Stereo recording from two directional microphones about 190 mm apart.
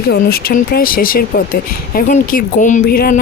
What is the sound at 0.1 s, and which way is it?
Speech, 55° left (ahead or behind).